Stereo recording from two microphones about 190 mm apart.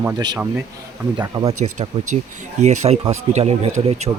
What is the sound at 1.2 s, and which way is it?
Speech, 20° right (ahead or behind).